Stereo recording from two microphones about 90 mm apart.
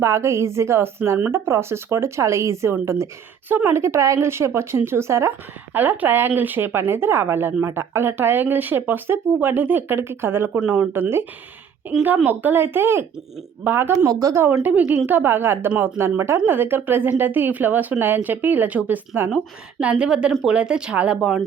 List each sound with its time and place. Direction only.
0.0 s speech: 30° right (ahead or behind)
5.7 s speech: 20° right (ahead or behind)
14.1 s speech: 40° right (ahead or behind)
14.6 s speech: 15° right (ahead or behind)